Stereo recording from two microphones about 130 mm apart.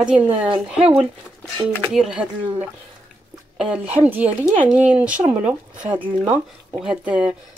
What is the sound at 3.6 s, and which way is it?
Speech, 10° right (ahead or behind).